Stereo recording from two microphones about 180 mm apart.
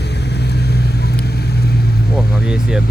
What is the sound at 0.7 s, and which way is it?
Vehicle, 65° left (ahead or behind).